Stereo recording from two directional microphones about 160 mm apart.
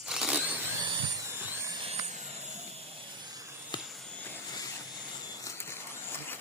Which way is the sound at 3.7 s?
30° left (ahead or behind).